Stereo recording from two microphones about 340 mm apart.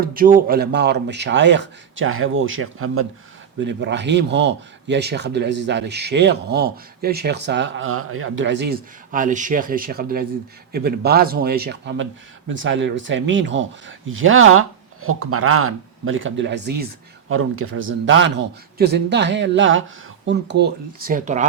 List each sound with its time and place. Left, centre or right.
0.0 s speech: right